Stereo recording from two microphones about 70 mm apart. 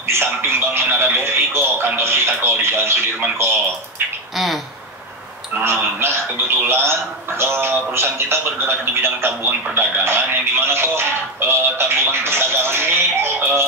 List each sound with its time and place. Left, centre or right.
0.1 s speech: right
5.6 s speech: right